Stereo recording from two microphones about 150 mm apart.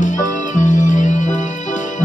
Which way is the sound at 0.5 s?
55° left (ahead or behind).